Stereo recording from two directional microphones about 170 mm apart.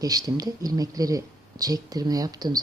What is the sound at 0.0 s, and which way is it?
Speech, 20° right (ahead or behind).